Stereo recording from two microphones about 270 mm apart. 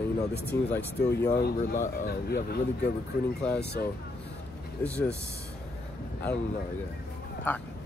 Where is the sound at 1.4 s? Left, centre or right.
Left.